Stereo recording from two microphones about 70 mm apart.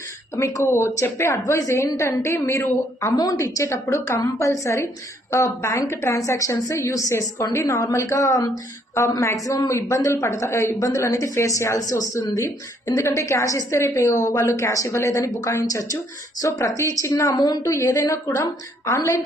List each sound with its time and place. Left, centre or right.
0.3 s a woman's voice: left
9.0 s a woman's voice: left
12.8 s a woman's voice: left